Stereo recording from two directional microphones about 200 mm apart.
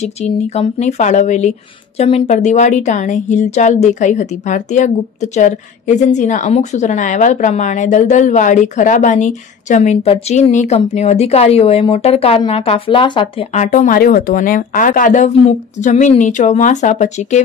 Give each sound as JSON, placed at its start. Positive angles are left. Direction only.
{"t": 0.0, "sound": "a woman's voice", "side_deg": 35}